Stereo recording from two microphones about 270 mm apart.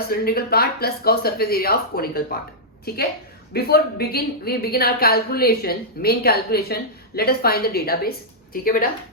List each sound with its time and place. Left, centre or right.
0.1 s speech: left